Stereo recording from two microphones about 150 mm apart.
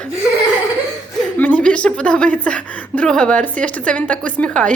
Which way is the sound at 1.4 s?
10° left (ahead or behind).